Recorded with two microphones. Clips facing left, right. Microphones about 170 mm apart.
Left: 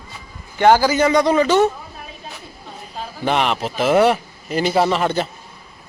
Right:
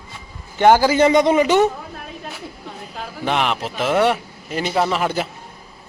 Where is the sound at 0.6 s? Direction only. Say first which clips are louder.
Even; 15° right (ahead or behind).